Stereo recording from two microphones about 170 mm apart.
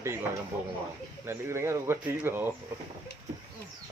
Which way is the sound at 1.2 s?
15° right (ahead or behind).